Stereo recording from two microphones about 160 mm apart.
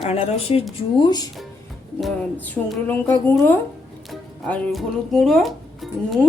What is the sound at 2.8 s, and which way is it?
A woman's voice, 10° left (ahead or behind).